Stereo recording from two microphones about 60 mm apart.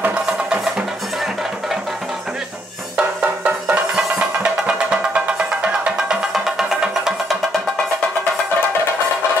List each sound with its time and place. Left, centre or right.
0.5 s music: centre
3.0 s music: centre
6.3 s music: centre